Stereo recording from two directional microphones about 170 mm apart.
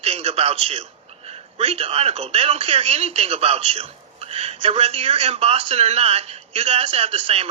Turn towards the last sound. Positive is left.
turn(degrees=-35)  # may be behind; listen again after turning